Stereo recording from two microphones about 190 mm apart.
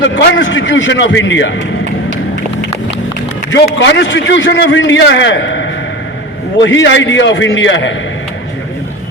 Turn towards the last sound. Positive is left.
turn(degrees=75)  # may be behind; listen again after turning